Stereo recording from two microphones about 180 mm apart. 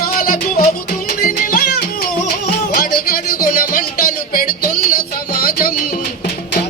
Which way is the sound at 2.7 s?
55° left (ahead or behind).